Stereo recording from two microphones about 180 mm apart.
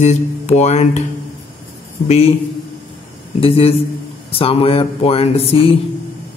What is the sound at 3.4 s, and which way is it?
Speech, 30° left (ahead or behind).